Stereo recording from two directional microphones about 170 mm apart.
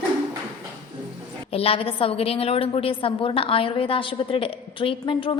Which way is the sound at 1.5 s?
35° left (ahead or behind).